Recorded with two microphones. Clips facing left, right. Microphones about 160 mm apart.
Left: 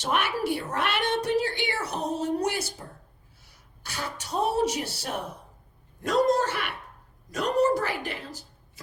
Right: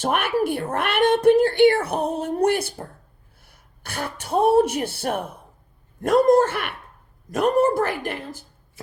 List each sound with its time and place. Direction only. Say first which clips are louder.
0.0 s speech: right 5 dB; 55° right (ahead or behind)